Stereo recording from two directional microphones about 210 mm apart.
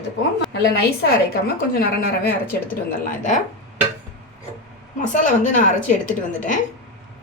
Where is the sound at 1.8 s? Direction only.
45° left (ahead or behind).